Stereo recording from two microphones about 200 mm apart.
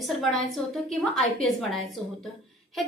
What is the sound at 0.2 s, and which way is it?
A woman's voice, centre (ahead or behind).